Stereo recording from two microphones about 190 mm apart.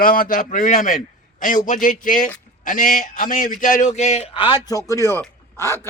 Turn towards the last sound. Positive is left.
turn(degrees=15)  # may be behind; listen again after turning